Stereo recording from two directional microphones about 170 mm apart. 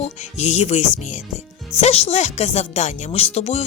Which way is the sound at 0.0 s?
40° left (ahead or behind).